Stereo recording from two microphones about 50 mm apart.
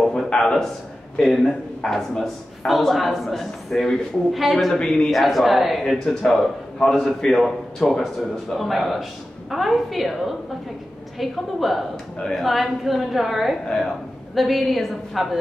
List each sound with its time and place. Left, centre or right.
0.3 s a man's voice: centre
4.7 s speech: centre
5.1 s a man's voice: centre